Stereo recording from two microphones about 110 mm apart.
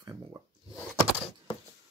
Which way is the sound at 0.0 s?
30° right (ahead or behind).